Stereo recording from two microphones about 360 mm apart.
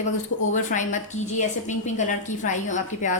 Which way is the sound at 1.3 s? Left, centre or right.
Centre.